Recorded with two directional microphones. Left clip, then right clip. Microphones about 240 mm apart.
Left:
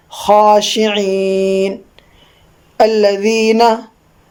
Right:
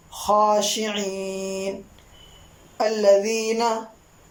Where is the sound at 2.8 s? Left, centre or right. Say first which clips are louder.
Left 7 dB; left.